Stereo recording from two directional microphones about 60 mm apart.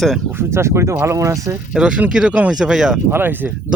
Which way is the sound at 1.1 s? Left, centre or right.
Right.